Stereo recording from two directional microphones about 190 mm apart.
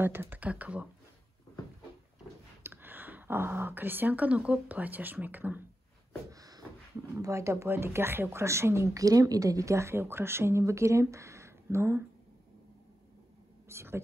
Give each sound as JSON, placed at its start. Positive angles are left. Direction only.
{"t": 0.0, "sound": "speech", "side_deg": -10}
{"t": 2.6, "sound": "speech", "side_deg": -10}
{"t": 6.3, "sound": "a sound", "side_deg": -20}
{"t": 7.2, "sound": "speech", "side_deg": -15}
{"t": 13.7, "sound": "speech", "side_deg": -15}